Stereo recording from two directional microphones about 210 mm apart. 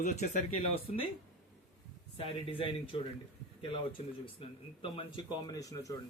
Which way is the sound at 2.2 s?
25° left (ahead or behind).